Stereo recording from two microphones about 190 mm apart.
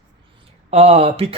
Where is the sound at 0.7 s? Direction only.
30° right (ahead or behind).